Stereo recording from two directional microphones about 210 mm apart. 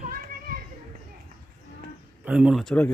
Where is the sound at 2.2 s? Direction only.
5° right (ahead or behind).